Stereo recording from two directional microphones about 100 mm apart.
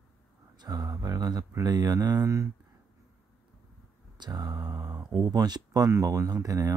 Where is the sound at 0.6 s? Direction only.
40° right (ahead or behind).